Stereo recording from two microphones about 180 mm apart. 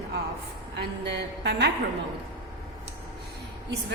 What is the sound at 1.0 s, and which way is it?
Speech, 70° right (ahead or behind).